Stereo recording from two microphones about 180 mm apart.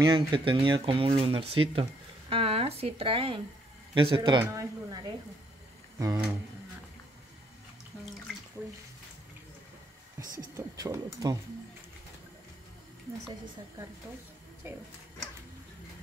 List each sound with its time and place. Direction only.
0.0 s a woman's voice: 25° right (ahead or behind)
5.9 s a sound: 20° right (ahead or behind)
10.1 s a woman's voice: 15° right (ahead or behind)